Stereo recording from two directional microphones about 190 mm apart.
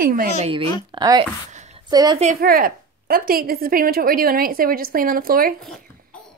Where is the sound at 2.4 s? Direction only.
50° right (ahead or behind).